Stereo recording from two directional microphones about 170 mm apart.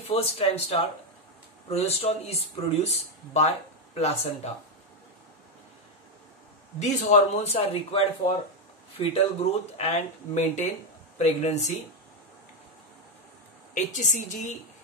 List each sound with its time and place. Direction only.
0.1 s speech: 35° left (ahead or behind)
3.3 s speech: 40° left (ahead or behind)
6.8 s speech: 40° left (ahead or behind)
13.7 s a woman's voice: 45° left (ahead or behind)